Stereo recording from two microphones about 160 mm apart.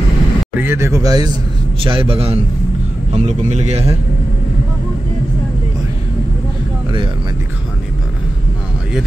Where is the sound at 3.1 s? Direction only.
45° right (ahead or behind).